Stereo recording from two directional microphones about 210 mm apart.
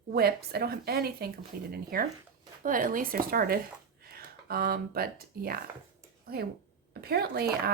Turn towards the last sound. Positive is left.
turn(degrees=-50)  # may be behind; listen again after turning